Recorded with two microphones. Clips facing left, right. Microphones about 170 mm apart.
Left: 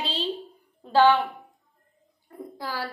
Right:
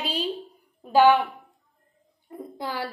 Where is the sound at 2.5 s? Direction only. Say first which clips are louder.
Right 2 dB; 20° right (ahead or behind).